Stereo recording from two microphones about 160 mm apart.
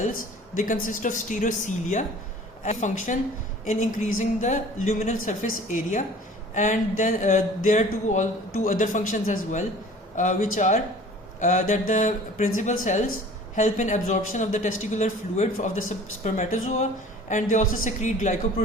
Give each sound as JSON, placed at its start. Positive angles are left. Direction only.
{"t": 0.0, "sound": "speech", "side_deg": 55}